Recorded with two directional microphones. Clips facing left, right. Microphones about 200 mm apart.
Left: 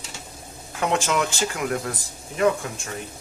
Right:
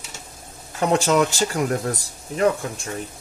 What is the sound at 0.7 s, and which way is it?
Speech, 40° right (ahead or behind).